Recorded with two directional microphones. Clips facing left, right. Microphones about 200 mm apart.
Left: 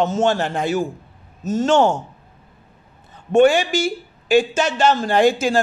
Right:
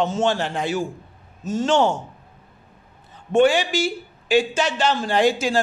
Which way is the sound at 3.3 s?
45° left (ahead or behind).